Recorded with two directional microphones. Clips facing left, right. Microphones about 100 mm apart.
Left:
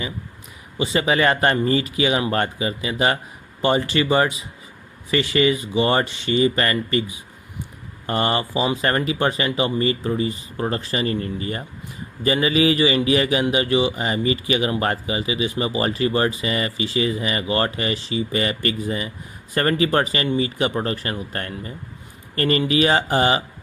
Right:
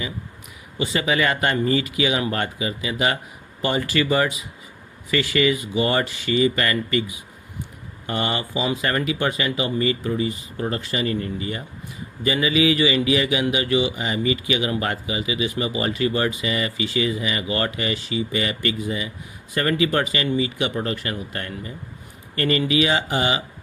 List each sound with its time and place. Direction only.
0.8 s speech: 30° left (ahead or behind)